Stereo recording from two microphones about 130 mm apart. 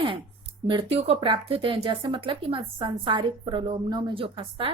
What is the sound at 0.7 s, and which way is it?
Speech, 45° right (ahead or behind).